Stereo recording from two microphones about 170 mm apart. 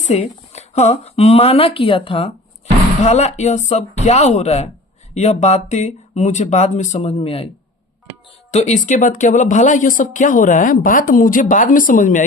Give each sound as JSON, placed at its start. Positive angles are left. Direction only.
{"t": 0.1, "sound": "speech", "side_deg": 40}
{"t": 8.4, "sound": "speech", "side_deg": 40}